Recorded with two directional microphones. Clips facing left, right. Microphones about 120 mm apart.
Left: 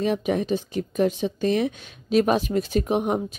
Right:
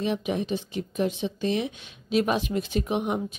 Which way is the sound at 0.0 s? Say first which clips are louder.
Left 4 dB; 45° left (ahead or behind).